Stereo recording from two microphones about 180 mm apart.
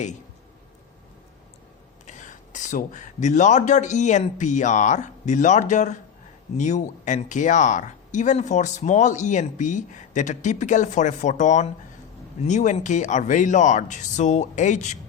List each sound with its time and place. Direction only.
2.0 s a woman's voice: 45° left (ahead or behind)